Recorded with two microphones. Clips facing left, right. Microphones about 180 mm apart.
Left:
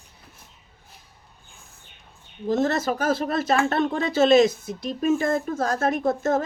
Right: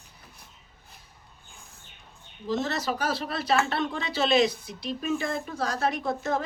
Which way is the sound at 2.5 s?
50° left (ahead or behind).